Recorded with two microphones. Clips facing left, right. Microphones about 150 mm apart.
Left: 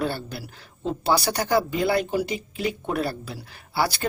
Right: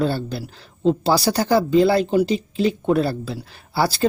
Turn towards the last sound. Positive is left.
turn(degrees=-30)  # may be behind; listen again after turning